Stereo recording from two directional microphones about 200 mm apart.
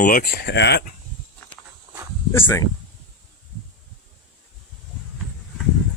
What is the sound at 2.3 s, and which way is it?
Speech, 10° left (ahead or behind).